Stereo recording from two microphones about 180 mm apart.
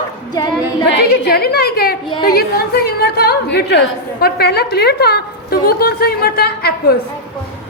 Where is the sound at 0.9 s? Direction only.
70° left (ahead or behind).